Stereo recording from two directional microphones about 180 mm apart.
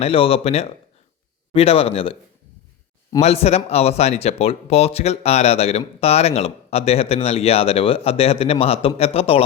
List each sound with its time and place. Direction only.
0.0 s speech: 30° left (ahead or behind)
3.2 s speech: 35° left (ahead or behind)